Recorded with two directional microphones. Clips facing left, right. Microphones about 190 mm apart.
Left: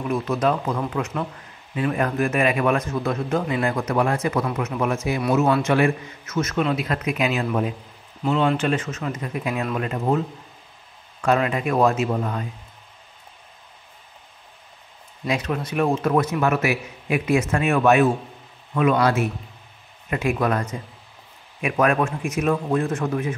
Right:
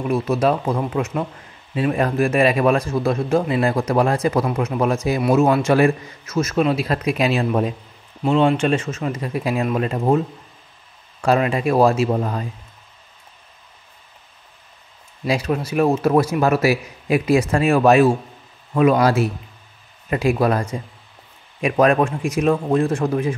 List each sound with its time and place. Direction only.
0.1 s a man's voice: 30° right (ahead or behind)
15.2 s a man's voice: 30° right (ahead or behind)